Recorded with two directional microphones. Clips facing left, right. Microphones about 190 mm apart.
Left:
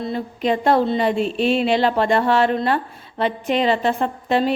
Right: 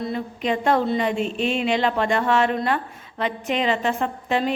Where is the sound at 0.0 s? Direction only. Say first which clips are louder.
Left 3 dB; 35° left (ahead or behind).